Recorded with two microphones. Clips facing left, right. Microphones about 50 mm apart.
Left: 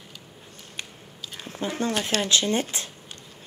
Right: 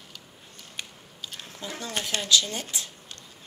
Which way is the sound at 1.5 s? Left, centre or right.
Left.